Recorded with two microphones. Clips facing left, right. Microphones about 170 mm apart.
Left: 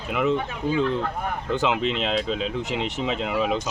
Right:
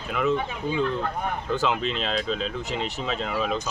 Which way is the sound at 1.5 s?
15° left (ahead or behind).